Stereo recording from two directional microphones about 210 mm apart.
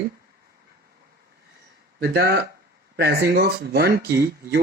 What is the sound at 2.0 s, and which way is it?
Speech, 50° right (ahead or behind).